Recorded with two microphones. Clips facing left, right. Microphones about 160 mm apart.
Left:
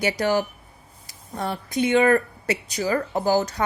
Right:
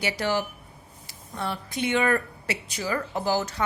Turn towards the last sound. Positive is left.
turn(degrees=45)  # may be behind; listen again after turning